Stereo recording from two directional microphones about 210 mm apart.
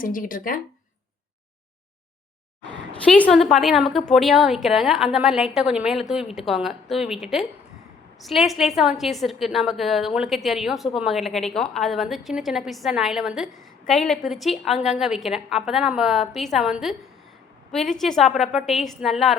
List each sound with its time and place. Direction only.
0.0 s speech: 40° left (ahead or behind)
3.0 s a woman's voice: 5° left (ahead or behind)
17.9 s a woman's voice: centre (ahead or behind)